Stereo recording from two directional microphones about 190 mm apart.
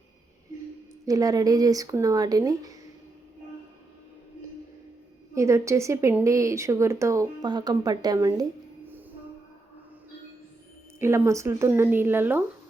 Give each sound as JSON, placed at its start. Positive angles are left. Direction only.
{"t": 1.0, "sound": "speech", "side_deg": -20}
{"t": 5.3, "sound": "a woman's voice", "side_deg": -15}
{"t": 11.0, "sound": "a woman's voice", "side_deg": -15}